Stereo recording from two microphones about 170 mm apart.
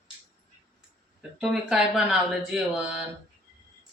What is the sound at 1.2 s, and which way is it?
Speech, 5° right (ahead or behind).